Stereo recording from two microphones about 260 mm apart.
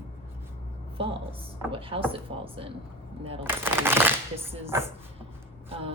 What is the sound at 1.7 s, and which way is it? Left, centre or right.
A woman's voice, right.